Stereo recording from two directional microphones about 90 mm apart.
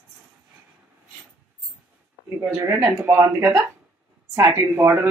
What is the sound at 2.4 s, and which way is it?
Speech, 25° right (ahead or behind).